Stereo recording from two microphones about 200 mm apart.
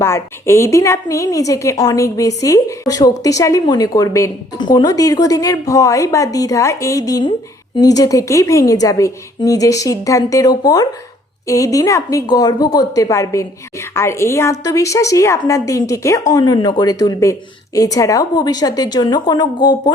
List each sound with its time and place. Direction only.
0.0 s a woman's voice: 15° left (ahead or behind)